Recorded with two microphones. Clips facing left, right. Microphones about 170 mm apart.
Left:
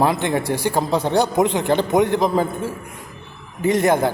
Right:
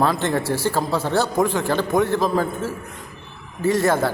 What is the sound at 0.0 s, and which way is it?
A man's voice, 15° left (ahead or behind).